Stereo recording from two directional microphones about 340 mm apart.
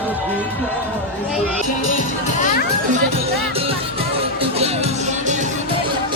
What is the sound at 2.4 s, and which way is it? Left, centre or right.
Music, left.